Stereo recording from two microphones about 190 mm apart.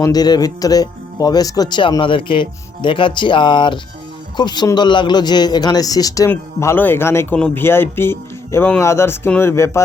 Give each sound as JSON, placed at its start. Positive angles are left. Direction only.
{"t": 0.0, "sound": "speech", "side_deg": 20}